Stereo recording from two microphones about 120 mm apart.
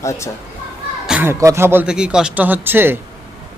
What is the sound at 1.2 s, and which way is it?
Speech, 20° right (ahead or behind).